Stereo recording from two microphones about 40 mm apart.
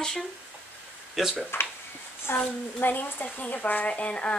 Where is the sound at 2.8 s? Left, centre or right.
Left.